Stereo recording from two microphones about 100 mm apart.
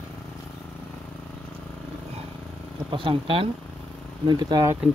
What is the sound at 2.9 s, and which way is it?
Speech, 60° right (ahead or behind).